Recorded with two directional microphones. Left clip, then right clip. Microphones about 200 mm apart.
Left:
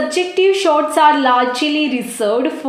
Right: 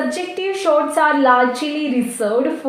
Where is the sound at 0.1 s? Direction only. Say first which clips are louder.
Left 8 dB; 35° left (ahead or behind).